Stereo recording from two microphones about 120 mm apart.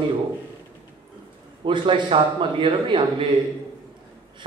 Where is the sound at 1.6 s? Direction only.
45° right (ahead or behind).